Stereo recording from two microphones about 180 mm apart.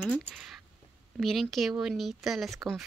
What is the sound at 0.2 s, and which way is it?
Speech, 5° right (ahead or behind).